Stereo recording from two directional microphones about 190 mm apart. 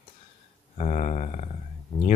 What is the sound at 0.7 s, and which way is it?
Speech, 35° left (ahead or behind).